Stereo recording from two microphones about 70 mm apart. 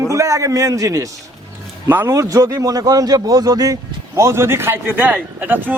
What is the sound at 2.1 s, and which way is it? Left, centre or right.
A man's voice, right.